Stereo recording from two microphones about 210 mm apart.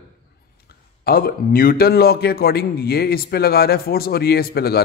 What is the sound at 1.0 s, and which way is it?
A man's voice, 45° left (ahead or behind).